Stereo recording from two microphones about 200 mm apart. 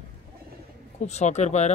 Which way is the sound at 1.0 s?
35° left (ahead or behind).